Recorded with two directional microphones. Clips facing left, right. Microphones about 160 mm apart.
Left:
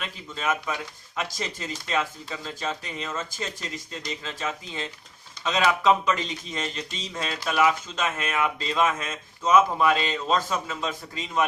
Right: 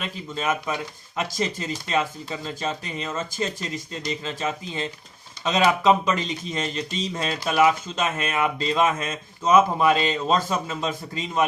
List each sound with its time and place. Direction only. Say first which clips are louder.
0.3 s speech: right 2 dB; 30° right (ahead or behind)